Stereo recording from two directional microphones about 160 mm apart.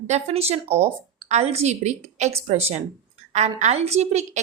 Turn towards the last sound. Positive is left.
turn(degrees=-45)  # may be behind; listen again after turning